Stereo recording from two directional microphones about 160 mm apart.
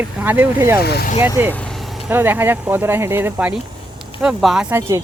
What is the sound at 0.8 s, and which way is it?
Speech, 90° left.